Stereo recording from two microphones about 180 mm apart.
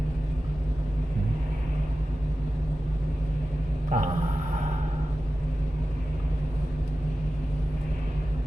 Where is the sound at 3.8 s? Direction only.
45° right (ahead or behind).